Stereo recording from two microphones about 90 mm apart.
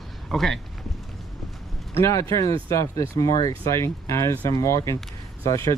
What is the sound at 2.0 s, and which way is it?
Speech, 35° left (ahead or behind).